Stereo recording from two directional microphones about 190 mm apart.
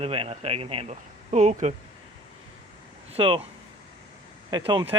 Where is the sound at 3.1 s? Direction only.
25° right (ahead or behind).